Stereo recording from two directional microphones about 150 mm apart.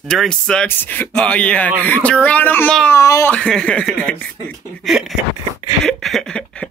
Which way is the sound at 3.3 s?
5° left (ahead or behind).